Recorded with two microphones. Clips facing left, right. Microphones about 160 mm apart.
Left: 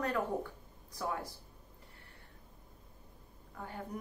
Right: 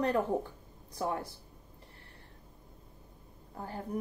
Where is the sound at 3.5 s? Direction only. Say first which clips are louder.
Right 3 dB; 35° right (ahead or behind).